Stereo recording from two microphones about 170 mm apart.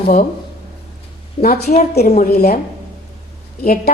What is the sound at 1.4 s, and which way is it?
A woman's voice, 65° left (ahead or behind).